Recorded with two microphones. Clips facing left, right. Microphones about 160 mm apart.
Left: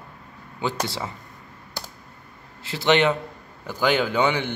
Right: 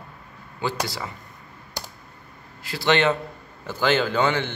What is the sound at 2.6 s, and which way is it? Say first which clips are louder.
A man's voice: left 1 dB; 20° left (ahead or behind).